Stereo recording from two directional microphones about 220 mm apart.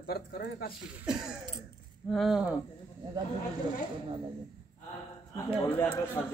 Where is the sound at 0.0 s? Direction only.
40° left (ahead or behind).